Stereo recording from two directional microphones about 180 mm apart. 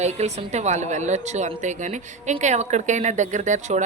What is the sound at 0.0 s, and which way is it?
A woman's voice, 40° right (ahead or behind).